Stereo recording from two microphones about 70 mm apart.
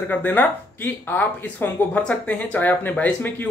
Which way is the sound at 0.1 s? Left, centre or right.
Left.